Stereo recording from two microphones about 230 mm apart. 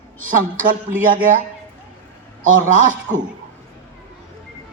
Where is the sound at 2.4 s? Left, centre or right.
Right.